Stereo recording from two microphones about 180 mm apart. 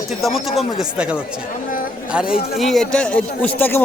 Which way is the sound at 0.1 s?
Centre (ahead or behind).